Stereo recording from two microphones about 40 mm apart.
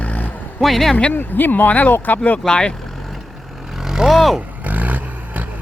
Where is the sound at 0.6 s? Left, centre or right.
Centre.